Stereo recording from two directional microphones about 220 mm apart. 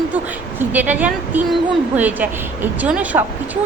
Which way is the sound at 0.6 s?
10° right (ahead or behind).